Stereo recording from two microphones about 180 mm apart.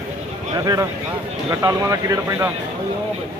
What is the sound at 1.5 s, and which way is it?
Speech, 15° right (ahead or behind).